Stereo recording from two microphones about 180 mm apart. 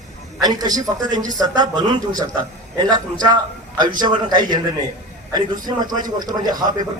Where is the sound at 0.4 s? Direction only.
20° right (ahead or behind).